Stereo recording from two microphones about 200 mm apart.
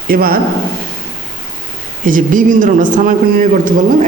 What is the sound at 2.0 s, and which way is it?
Speech, 40° right (ahead or behind).